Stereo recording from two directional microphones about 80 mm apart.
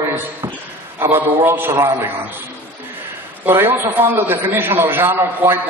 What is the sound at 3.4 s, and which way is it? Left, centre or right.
A man's voice, right.